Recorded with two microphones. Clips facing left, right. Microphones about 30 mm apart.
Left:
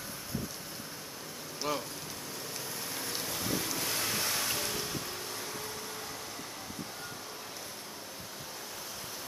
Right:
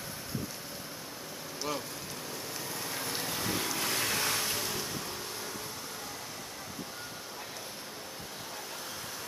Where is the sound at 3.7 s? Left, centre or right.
Right.